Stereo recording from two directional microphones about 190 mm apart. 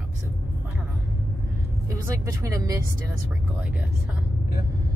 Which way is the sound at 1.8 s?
15° right (ahead or behind).